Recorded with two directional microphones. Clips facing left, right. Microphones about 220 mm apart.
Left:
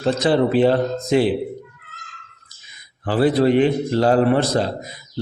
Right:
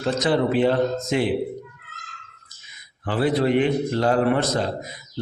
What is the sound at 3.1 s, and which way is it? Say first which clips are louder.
A man's voice: left 4 dB; 35° left (ahead or behind).